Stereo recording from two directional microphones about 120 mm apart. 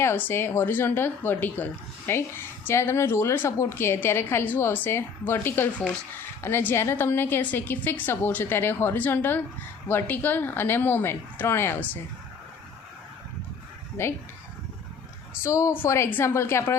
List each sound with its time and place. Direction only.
0.0 s a woman's voice: 20° left (ahead or behind)
14.0 s a woman's voice: 20° left (ahead or behind)
15.4 s a woman's voice: 25° left (ahead or behind)